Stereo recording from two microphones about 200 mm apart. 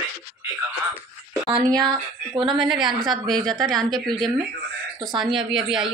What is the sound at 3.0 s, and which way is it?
Speech, centre (ahead or behind).